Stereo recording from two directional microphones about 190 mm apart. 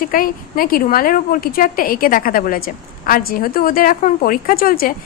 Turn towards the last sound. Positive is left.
turn(degrees=50)  # may be behind; listen again after turning